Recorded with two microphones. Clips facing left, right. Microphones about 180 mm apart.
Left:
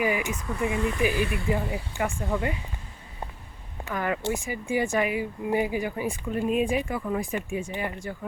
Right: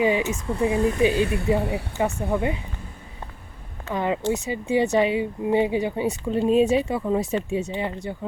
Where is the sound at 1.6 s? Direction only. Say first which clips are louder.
Right 5 dB; 65° right (ahead or behind).